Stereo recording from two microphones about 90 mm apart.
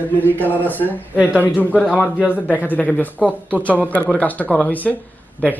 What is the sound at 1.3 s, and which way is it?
Speech, 15° left (ahead or behind).